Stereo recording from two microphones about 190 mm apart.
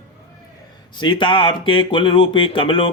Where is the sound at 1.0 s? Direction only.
25° left (ahead or behind).